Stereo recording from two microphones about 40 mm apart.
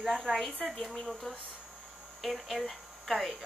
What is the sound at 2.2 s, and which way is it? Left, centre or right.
Speech, centre.